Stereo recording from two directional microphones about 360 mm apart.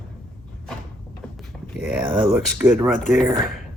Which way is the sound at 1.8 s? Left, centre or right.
Centre.